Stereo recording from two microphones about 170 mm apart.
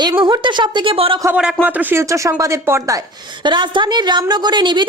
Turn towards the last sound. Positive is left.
turn(degrees=-25)  # may be behind; listen again after turning